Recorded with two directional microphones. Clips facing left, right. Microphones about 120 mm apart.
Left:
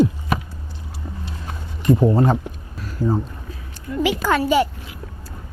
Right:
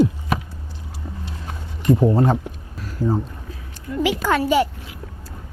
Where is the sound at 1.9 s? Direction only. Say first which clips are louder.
Even; 20° left (ahead or behind).